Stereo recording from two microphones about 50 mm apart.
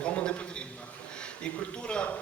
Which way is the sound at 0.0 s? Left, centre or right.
Left.